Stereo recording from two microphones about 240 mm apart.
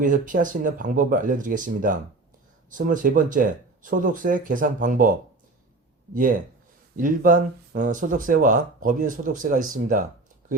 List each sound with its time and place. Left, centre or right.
0.0 s speech: right
6.9 s speech: right